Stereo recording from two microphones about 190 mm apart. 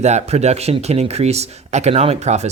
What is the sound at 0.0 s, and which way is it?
Speech, 35° right (ahead or behind).